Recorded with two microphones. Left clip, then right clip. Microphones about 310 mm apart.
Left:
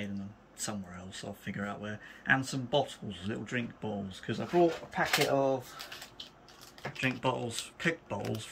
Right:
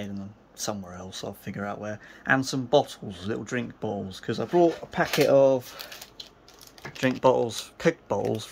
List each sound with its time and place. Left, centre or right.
0.6 s speech: centre; by 6.2 s right
7.0 s speech: centre